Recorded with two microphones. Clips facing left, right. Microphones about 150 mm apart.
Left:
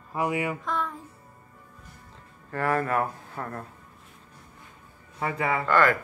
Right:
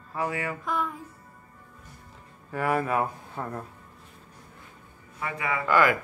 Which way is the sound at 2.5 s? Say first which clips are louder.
Even; 10° right (ahead or behind).